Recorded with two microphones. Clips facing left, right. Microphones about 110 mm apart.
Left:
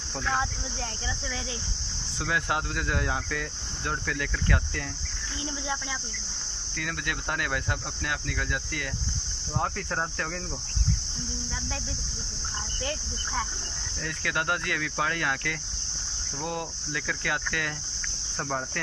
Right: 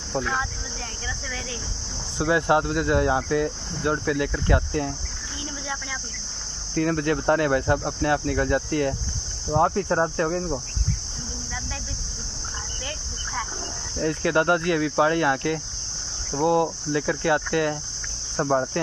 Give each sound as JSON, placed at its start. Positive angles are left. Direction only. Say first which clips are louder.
{"t": 2.1, "sound": "speech", "louder": "right 9 dB", "side_deg": -25}
{"t": 6.7, "sound": "speech", "louder": "right 12 dB", "side_deg": -35}
{"t": 13.9, "sound": "speech", "louder": "right 10 dB", "side_deg": -30}